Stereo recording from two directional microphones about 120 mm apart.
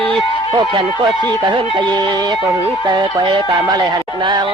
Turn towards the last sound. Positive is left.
turn(degrees=-35)  # may be behind; listen again after turning